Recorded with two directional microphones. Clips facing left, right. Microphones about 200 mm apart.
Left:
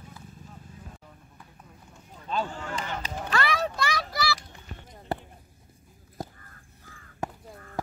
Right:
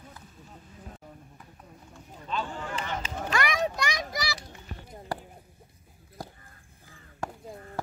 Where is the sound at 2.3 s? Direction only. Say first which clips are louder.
Left 2 dB; 40° left (ahead or behind).